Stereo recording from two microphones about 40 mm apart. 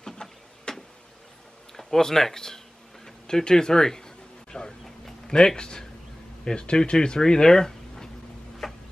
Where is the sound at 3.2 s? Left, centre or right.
Centre.